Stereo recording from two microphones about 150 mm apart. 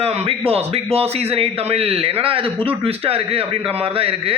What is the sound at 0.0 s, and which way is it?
A man's voice, 40° right (ahead or behind).